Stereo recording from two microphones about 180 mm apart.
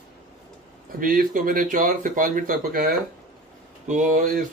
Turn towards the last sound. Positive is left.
turn(degrees=-50)  # may be behind; listen again after turning